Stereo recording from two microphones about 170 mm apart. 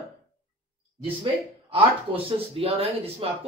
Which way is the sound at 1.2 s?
30° right (ahead or behind).